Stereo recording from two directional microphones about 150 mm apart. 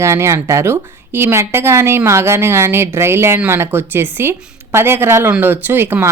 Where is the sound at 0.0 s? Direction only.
20° right (ahead or behind).